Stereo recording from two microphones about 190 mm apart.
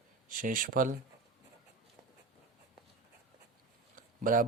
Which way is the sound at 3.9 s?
45° right (ahead or behind).